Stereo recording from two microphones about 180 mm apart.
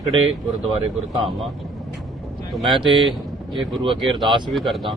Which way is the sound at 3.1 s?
Centre (ahead or behind).